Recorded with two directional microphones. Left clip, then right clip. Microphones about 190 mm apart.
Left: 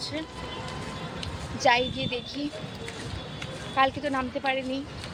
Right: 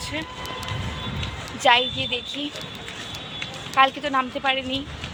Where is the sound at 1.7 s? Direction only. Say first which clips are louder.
Right 5 dB; centre (ahead or behind).